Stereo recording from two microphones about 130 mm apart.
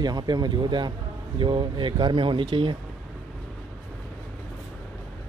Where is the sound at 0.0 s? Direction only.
30° right (ahead or behind).